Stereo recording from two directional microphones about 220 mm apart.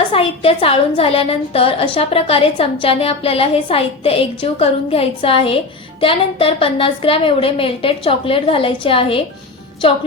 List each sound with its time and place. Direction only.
0.1 s a woman's voice: 25° left (ahead or behind)